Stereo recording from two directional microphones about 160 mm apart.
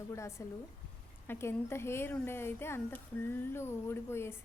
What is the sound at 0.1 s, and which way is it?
A woman's voice, 20° left (ahead or behind).